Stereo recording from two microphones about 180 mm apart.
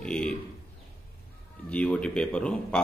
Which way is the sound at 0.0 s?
5° left (ahead or behind).